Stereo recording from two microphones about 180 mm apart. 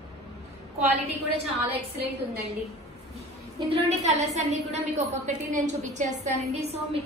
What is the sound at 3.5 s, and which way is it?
A woman's voice, 35° right (ahead or behind).